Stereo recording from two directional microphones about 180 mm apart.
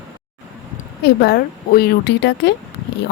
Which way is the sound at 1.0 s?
60° left (ahead or behind).